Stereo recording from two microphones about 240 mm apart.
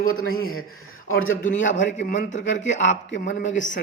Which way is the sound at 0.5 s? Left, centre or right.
Left.